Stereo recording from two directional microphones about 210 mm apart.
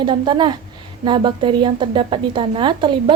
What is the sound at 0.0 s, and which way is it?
A woman's voice, 20° right (ahead or behind).